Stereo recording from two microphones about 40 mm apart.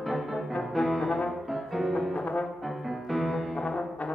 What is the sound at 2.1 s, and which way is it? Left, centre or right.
Brass instrument, left.